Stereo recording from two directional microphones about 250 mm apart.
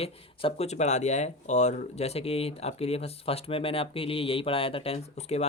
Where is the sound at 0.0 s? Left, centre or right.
Left.